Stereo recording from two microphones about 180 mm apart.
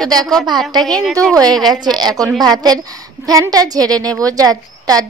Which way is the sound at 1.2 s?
20° right (ahead or behind).